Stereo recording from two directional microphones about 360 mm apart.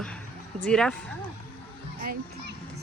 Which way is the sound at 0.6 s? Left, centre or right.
Centre.